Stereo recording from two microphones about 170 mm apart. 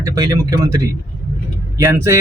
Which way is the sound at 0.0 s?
20° right (ahead or behind).